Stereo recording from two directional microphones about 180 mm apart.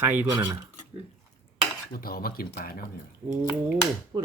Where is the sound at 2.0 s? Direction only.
55° left (ahead or behind).